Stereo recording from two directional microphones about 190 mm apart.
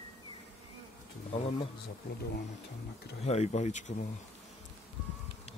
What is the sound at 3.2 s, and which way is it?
Speech, 35° left (ahead or behind).